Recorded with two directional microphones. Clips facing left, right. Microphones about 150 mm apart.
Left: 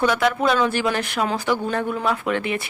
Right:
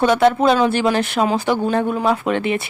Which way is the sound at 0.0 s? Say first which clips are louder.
Right 5 dB; 30° right (ahead or behind).